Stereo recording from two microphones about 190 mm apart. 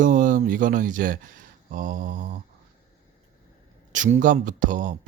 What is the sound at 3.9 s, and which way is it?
Speech, 40° right (ahead or behind).